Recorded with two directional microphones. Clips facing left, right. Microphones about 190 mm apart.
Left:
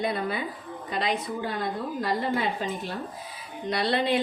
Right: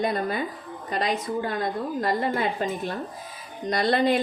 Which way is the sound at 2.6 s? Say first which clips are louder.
Right 3 dB; 55° right (ahead or behind).